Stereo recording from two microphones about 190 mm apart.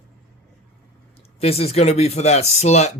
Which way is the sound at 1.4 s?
30° left (ahead or behind).